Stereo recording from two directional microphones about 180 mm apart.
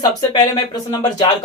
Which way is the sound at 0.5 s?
20° left (ahead or behind).